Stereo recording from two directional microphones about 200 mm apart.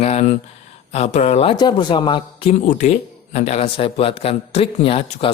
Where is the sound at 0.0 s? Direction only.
35° left (ahead or behind).